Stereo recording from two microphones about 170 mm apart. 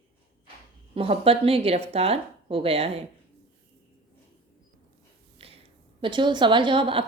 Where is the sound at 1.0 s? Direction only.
35° right (ahead or behind).